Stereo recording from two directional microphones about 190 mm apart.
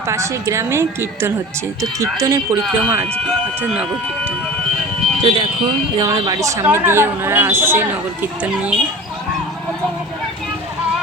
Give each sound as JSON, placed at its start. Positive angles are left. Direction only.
{"t": 0.1, "sound": "speech", "side_deg": -15}
{"t": 2.6, "sound": "speech", "side_deg": -5}
{"t": 5.2, "sound": "speech", "side_deg": -25}